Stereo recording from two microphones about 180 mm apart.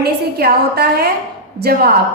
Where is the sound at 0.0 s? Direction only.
60° right (ahead or behind).